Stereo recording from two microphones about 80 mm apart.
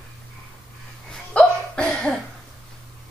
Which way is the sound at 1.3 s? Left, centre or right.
Centre.